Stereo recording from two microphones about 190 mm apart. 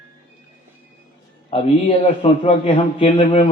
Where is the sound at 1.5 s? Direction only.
30° left (ahead or behind).